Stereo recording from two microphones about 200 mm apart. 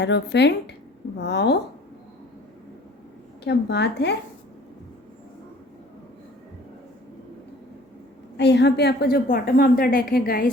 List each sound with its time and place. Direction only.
0.0 s speech: 60° left (ahead or behind)
3.4 s speech: 55° left (ahead or behind)
8.4 s a woman's voice: 60° left (ahead or behind)